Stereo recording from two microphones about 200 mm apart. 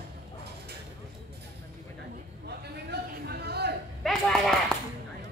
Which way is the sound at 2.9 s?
55° right (ahead or behind).